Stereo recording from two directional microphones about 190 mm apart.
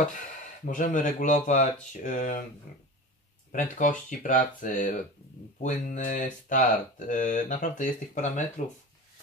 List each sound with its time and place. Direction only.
0.7 s speech: 45° left (ahead or behind)
3.5 s speech: 40° left (ahead or behind)